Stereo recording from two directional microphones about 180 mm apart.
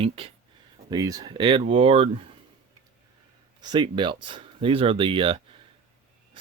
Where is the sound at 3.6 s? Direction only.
25° right (ahead or behind).